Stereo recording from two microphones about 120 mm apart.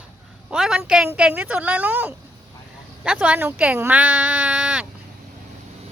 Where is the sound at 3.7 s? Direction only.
15° right (ahead or behind).